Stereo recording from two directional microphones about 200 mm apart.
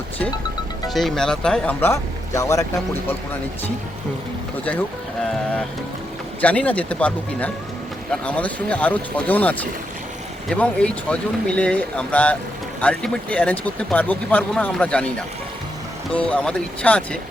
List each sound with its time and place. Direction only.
0.9 s speech: centre (ahead or behind)
5.3 s speech: 5° left (ahead or behind)
16.1 s speech: 5° left (ahead or behind)